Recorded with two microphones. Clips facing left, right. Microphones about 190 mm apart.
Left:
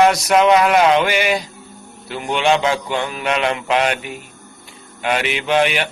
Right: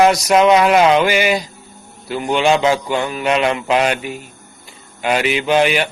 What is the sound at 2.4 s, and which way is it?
A man's voice, 5° right (ahead or behind).